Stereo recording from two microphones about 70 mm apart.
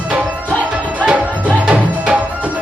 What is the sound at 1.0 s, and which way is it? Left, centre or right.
Music, centre.